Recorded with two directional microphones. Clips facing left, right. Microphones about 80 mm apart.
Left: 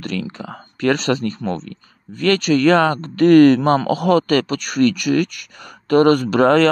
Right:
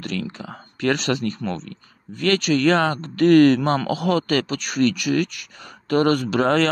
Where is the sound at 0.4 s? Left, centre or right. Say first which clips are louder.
Left 4 dB; left.